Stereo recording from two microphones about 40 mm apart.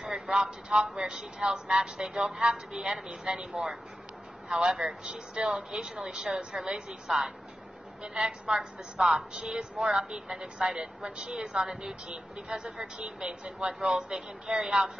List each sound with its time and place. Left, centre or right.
0.3 s a woman's voice: right
7.1 s a woman's voice: centre
10.2 s a woman's voice: centre; by 11.6 s right
11.6 s speech: centre